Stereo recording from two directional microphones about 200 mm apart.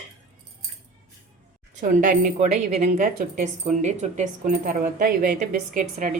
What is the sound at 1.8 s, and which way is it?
A woman's voice, 40° right (ahead or behind).